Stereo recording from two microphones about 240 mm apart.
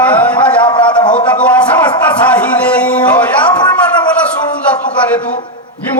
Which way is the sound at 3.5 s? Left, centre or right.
Centre.